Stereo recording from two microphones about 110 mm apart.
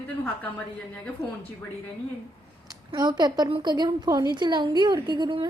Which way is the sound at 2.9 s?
35° right (ahead or behind).